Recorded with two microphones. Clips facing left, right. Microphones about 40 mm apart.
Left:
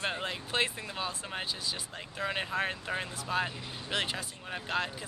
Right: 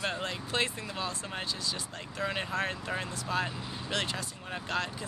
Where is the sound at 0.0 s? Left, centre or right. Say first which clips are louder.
Even; centre.